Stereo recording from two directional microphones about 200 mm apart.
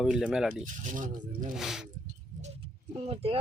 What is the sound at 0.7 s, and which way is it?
Speech, 40° right (ahead or behind).